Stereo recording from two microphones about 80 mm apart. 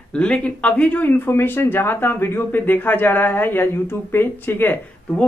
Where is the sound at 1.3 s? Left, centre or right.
Left.